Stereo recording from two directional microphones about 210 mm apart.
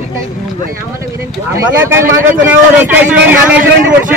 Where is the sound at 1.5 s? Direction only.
10° right (ahead or behind).